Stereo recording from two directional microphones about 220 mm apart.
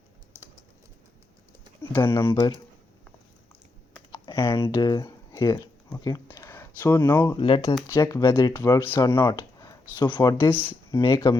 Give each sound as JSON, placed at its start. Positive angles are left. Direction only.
{"t": 2.0, "sound": "speech", "side_deg": 25}
{"t": 4.1, "sound": "computer keyboard", "side_deg": 25}
{"t": 4.6, "sound": "speech", "side_deg": 20}
{"t": 7.3, "sound": "speech", "side_deg": 25}
{"t": 7.9, "sound": "speech", "side_deg": 10}